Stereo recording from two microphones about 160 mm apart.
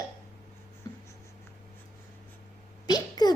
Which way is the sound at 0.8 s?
25° left (ahead or behind).